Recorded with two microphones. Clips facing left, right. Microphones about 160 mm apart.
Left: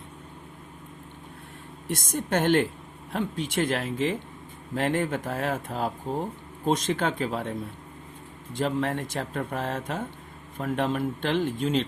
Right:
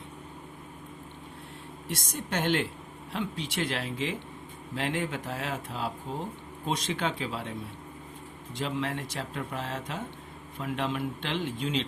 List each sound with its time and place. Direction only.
1.9 s speech: 50° left (ahead or behind)
8.5 s speech: 50° left (ahead or behind)